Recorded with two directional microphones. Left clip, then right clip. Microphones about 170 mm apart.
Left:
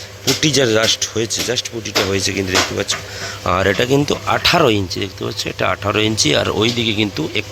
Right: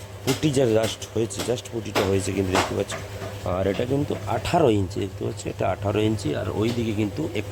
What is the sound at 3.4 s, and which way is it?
Speech, 15° left (ahead or behind).